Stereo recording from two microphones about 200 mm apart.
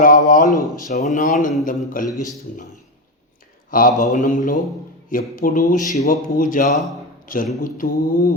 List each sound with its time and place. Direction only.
0.0 s speech: 40° left (ahead or behind)
3.7 s speech: 45° left (ahead or behind)
6.7 s speech: centre (ahead or behind)
7.3 s speech: 45° left (ahead or behind)